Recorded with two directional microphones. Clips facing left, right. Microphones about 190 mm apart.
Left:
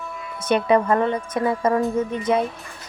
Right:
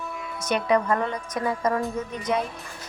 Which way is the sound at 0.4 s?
25° left (ahead or behind).